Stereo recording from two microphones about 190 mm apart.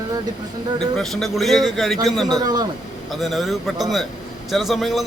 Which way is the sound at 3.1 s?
Centre (ahead or behind).